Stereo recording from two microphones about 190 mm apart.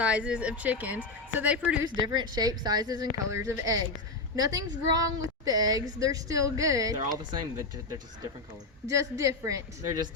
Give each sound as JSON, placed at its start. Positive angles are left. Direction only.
{"t": 0.0, "sound": "a woman's voice", "side_deg": -5}
{"t": 2.0, "sound": "a woman's voice", "side_deg": -20}
{"t": 8.9, "sound": "a woman's voice", "side_deg": -15}